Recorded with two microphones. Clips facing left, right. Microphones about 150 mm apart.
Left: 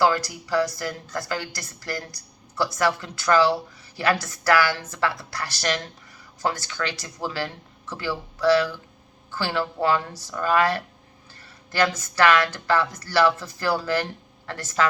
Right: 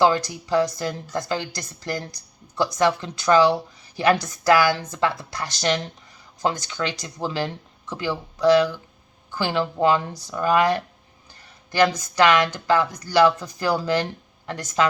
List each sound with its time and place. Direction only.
0.0 s speech: 20° right (ahead or behind)